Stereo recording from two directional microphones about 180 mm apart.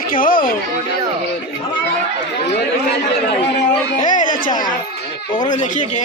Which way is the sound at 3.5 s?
45° left (ahead or behind).